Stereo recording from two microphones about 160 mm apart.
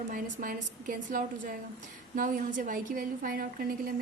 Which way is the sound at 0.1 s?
60° right (ahead or behind).